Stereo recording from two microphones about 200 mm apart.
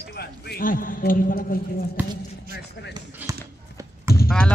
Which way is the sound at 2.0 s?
10° right (ahead or behind).